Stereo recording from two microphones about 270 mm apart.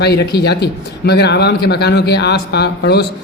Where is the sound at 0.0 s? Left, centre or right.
Left.